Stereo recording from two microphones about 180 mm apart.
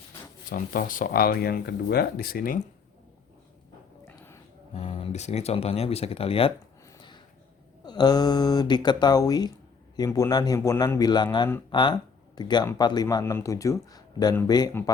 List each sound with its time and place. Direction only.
0.5 s speech: 50° left (ahead or behind)
4.7 s speech: 35° left (ahead or behind)
7.9 s speech: 20° left (ahead or behind)